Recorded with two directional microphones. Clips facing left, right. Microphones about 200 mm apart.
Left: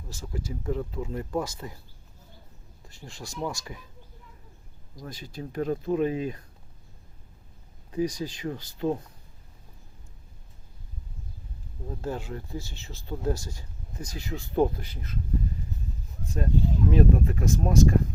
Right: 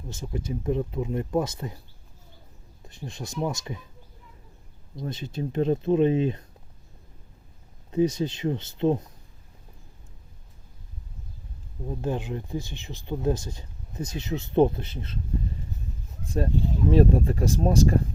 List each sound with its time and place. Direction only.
0.1 s speech: 20° right (ahead or behind)
2.8 s speech: 20° right (ahead or behind)
4.9 s speech: 25° right (ahead or behind)
7.9 s speech: 25° right (ahead or behind)
11.9 s speech: 20° right (ahead or behind)
16.9 s speech: 30° right (ahead or behind)